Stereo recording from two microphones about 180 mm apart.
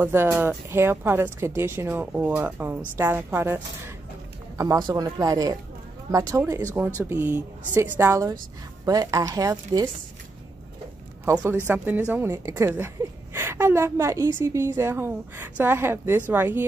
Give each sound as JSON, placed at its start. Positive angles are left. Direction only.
{"t": 0.0, "sound": "a woman's voice", "side_deg": -15}
{"t": 11.2, "sound": "a woman's voice", "side_deg": -15}